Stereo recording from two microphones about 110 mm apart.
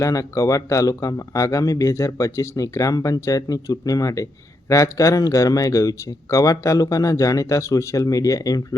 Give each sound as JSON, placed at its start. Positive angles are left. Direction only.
{"t": 0.0, "sound": "speech", "side_deg": 30}